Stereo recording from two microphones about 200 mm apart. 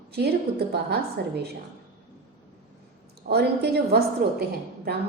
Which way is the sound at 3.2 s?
55° right (ahead or behind).